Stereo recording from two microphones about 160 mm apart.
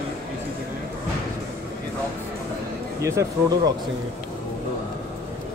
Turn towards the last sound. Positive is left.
turn(degrees=-20)  # may be behind; listen again after turning